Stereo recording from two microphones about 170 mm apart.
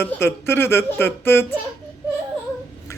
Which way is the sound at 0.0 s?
15° left (ahead or behind).